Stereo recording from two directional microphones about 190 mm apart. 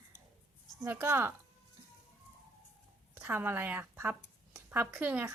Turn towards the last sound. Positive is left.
turn(degrees=-10)  # may be behind; listen again after turning